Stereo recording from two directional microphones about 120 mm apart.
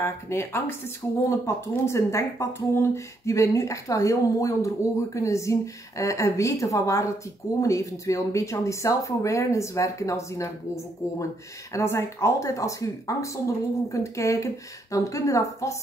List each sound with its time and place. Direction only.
0.0 s speech: 20° left (ahead or behind)
11.7 s speech: 25° left (ahead or behind)